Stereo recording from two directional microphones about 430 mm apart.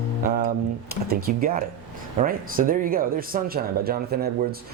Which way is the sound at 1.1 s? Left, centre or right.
Centre.